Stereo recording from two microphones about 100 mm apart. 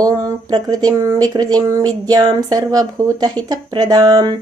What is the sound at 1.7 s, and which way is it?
Speech, 40° right (ahead or behind).